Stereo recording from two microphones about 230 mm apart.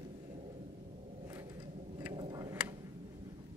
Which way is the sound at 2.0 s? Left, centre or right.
Centre.